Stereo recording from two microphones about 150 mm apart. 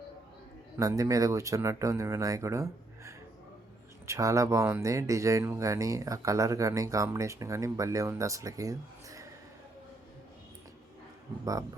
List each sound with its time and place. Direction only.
0.8 s speech: 25° right (ahead or behind)